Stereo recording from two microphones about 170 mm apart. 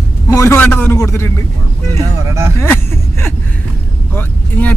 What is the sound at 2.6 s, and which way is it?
A man's voice, 15° left (ahead or behind).